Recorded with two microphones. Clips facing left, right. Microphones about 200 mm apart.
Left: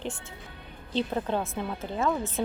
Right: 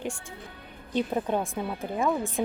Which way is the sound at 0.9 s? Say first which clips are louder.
Right 1 dB; 15° right (ahead or behind).